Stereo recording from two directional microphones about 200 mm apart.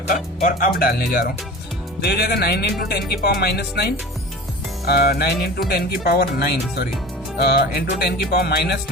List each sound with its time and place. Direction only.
0.1 s speech: 45° left (ahead or behind)